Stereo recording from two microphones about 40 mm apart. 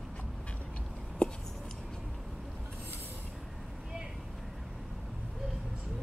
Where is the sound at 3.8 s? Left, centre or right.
Centre.